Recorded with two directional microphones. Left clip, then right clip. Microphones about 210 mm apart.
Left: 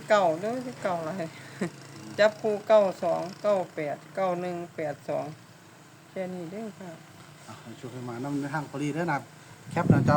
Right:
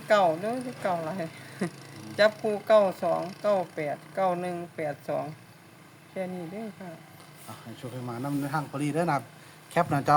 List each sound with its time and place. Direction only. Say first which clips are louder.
0.1 s speech: even; 5° right (ahead or behind)
8.0 s a man's voice: even; 35° right (ahead or behind)